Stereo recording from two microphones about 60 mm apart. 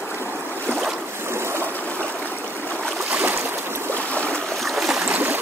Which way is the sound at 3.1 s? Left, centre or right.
Right.